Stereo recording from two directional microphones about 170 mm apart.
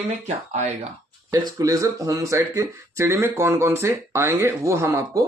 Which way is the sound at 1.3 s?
20° right (ahead or behind).